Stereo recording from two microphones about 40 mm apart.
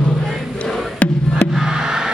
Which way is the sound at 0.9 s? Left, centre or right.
Left.